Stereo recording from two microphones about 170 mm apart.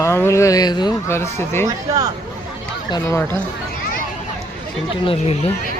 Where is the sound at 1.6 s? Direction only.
20° right (ahead or behind).